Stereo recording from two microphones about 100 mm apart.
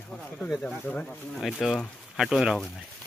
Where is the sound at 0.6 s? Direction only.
10° left (ahead or behind).